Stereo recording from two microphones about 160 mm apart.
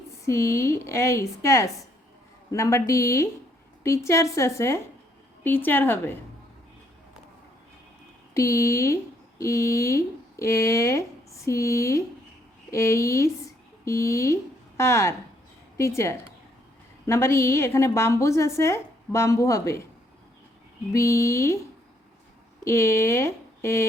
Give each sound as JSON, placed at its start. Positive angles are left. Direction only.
{"t": 0.3, "sound": "a woman's voice", "side_deg": 20}
{"t": 8.3, "sound": "a woman's voice", "side_deg": 20}
{"t": 20.9, "sound": "a woman's voice", "side_deg": 15}
{"t": 22.6, "sound": "speech", "side_deg": 15}